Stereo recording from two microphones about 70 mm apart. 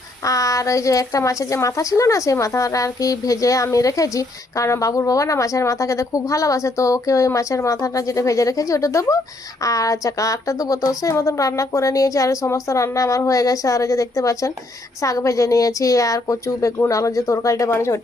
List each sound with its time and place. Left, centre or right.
0.3 s speech: left